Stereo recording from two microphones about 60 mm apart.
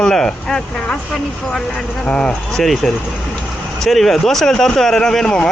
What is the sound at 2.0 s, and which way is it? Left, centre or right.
Speech, left.